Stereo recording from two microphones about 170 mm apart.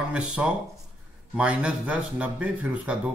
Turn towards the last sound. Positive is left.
turn(degrees=-10)  # may be behind; listen again after turning